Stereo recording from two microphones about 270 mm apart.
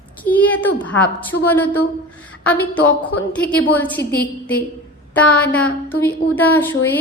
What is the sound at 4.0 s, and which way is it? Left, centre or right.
Speech, left.